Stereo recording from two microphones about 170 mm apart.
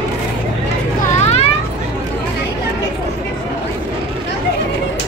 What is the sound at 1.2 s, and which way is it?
Vehicle, 40° left (ahead or behind).